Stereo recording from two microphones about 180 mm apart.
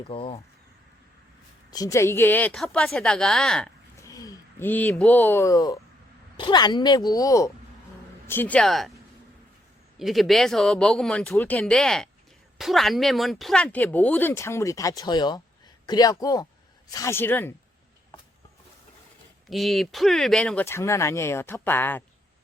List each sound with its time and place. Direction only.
0.1 s speech: 30° left (ahead or behind)
1.7 s speech: 20° left (ahead or behind)
4.0 s a sound: 20° left (ahead or behind)
4.7 s a woman's voice: 10° left (ahead or behind)
10.0 s a woman's voice: centre (ahead or behind)
19.5 s speech: centre (ahead or behind)